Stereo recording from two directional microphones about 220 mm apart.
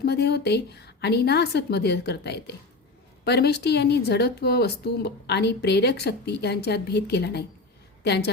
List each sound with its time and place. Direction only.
0.0 s a woman's voice: 50° left (ahead or behind)